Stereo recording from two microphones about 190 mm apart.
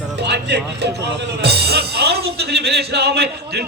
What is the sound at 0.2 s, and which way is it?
Music, 65° right (ahead or behind).